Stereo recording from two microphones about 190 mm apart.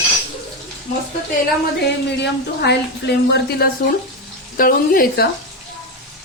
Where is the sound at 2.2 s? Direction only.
65° left (ahead or behind).